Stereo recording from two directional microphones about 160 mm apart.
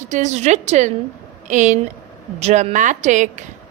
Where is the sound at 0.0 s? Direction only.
50° right (ahead or behind).